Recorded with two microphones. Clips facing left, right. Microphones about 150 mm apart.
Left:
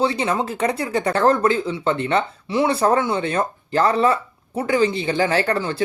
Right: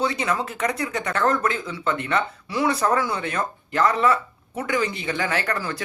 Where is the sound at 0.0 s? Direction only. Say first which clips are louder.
Left 4 dB; 30° left (ahead or behind).